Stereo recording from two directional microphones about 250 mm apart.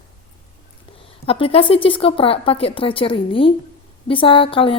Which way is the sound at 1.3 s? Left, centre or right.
Left.